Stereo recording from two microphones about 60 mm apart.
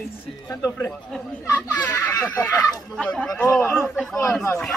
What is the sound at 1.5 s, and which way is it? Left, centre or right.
Speech, left.